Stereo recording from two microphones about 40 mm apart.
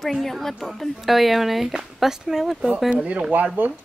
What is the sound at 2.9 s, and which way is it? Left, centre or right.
Speech, right.